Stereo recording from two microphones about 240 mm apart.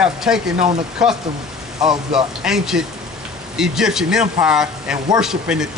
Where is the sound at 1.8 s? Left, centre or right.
Centre.